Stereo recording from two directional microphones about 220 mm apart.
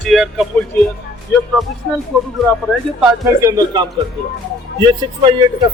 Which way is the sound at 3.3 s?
15° right (ahead or behind).